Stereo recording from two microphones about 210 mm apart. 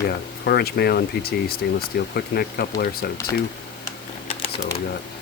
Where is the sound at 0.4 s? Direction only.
50° left (ahead or behind).